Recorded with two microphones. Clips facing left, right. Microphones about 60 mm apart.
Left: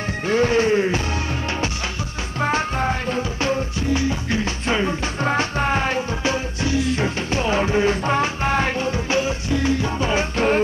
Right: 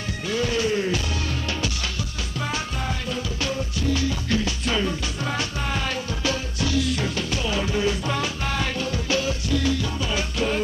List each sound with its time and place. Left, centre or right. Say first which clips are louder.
0.3 s music: left 6 dB; left
2.4 s music: left 9 dB; left